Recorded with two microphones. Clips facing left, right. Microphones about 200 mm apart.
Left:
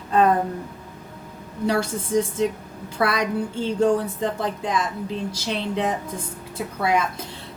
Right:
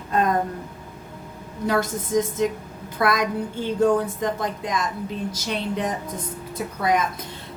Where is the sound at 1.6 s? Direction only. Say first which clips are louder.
Even; 30° left (ahead or behind).